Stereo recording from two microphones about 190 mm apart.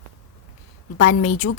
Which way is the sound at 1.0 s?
40° left (ahead or behind).